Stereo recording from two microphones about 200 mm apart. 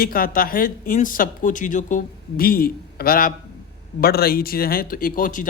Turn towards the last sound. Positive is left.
turn(degrees=40)  # may be behind; listen again after turning